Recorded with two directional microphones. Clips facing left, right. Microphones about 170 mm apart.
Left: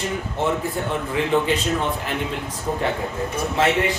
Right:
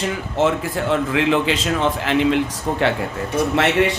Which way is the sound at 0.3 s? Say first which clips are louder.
Right 5 dB; 90° right.